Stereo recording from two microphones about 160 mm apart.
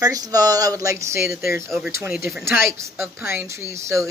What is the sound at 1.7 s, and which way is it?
Speech, 5° right (ahead or behind).